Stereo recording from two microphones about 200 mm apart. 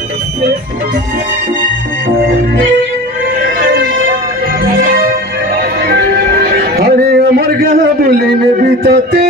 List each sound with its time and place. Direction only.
3.4 s a sound: 45° right (ahead or behind)
4.6 s music: 45° right (ahead or behind)
8.8 s music: 55° right (ahead or behind)